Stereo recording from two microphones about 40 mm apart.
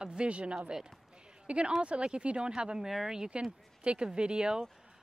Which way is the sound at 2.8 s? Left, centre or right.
Centre.